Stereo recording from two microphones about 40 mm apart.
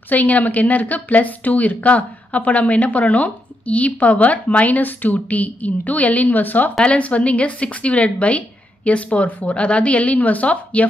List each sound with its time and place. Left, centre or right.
0.1 s a woman's voice: left
6.8 s a woman's voice: left